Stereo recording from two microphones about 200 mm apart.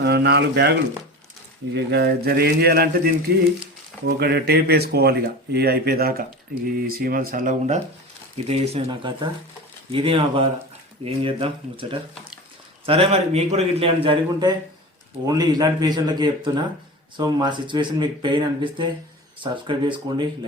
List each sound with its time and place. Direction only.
0.0 s speech: 55° right (ahead or behind)
8.4 s a man's voice: 30° right (ahead or behind)